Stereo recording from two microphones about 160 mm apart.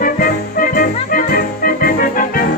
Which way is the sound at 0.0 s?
65° left (ahead or behind).